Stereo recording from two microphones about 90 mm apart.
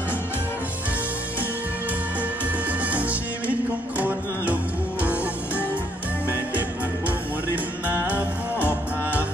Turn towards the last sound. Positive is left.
turn(degrees=-20)  # may be behind; listen again after turning